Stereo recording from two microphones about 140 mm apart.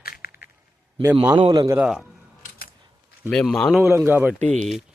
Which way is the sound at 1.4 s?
40° right (ahead or behind).